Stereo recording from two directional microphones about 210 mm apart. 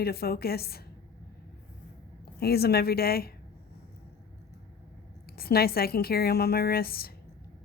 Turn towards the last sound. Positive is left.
turn(degrees=45)  # may be behind; listen again after turning